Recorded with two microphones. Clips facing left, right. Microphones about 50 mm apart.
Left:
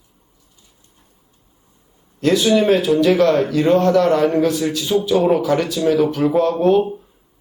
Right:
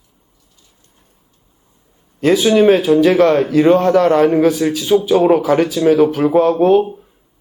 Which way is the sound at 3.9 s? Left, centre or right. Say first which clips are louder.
Right 3 dB; centre.